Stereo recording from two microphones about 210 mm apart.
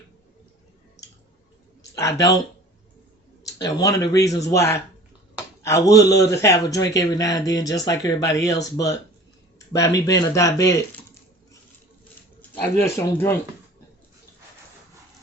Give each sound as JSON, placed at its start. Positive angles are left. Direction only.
{"t": 1.8, "sound": "speech", "side_deg": 15}
{"t": 3.4, "sound": "speech", "side_deg": 15}
{"t": 12.4, "sound": "speech", "side_deg": 10}